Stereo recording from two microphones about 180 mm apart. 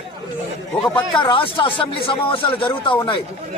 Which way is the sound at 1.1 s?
25° left (ahead or behind).